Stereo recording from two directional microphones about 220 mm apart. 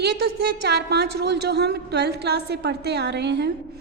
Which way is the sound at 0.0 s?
45° right (ahead or behind).